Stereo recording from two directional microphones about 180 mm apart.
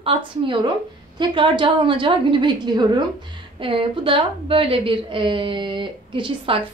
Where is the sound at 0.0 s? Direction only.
30° right (ahead or behind).